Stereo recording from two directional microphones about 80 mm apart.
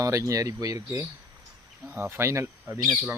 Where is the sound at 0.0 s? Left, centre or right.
Right.